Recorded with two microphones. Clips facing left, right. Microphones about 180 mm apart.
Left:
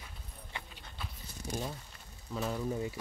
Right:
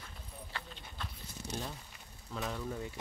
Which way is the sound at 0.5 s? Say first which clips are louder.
Left 2 dB; 10° left (ahead or behind).